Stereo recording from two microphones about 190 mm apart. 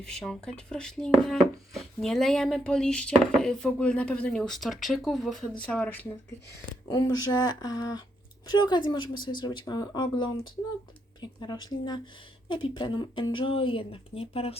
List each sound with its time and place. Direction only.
0.0 s speech: 5° left (ahead or behind)
6.8 s speech: 20° left (ahead or behind)